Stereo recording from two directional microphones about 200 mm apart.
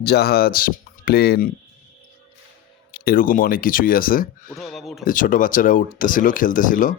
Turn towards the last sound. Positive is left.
turn(degrees=40)  # may be behind; listen again after turning